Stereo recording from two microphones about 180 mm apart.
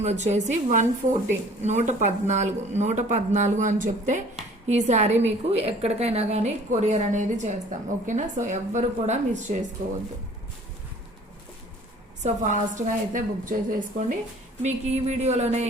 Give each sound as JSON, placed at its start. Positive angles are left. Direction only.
{"t": 0.0, "sound": "a woman's voice", "side_deg": -40}
{"t": 12.2, "sound": "a woman's voice", "side_deg": -45}
{"t": 14.6, "sound": "a woman's voice", "side_deg": -35}